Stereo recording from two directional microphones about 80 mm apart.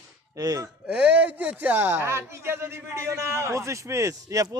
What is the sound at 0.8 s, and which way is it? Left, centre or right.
Speech, centre.